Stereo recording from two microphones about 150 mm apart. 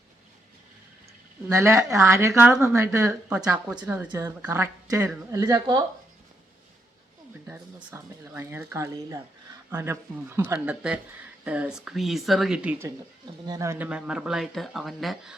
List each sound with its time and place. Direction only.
1.5 s speech: 20° right (ahead or behind)
7.4 s speech: 10° right (ahead or behind)
13.4 s speech: 25° right (ahead or behind); by 15.4 s centre (ahead or behind)